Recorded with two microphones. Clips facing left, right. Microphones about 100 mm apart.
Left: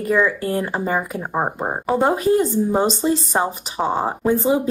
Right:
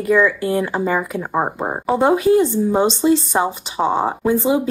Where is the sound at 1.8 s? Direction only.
15° right (ahead or behind).